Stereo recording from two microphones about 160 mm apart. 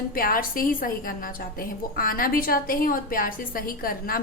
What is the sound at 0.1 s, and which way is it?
A woman's voice, 65° left (ahead or behind).